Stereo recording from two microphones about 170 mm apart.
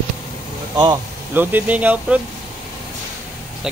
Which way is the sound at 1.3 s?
10° right (ahead or behind).